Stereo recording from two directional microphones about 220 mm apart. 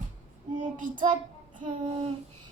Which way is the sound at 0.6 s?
35° right (ahead or behind).